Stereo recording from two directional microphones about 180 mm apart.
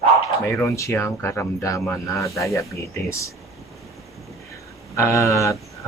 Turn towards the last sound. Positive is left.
turn(degrees=15)  # may be behind; listen again after turning